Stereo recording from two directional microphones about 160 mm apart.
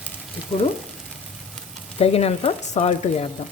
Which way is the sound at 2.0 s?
40° left (ahead or behind).